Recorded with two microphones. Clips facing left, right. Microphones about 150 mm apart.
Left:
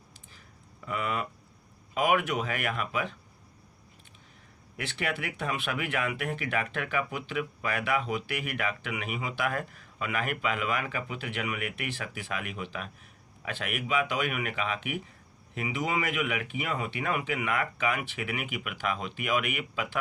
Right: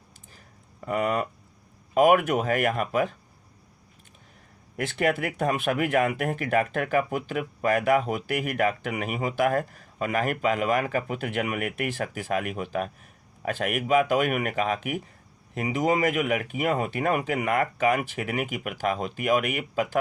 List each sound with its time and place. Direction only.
0.3 s a sound: 45° right (ahead or behind)
2.0 s speech: 45° right (ahead or behind)
4.8 s speech: 45° right (ahead or behind)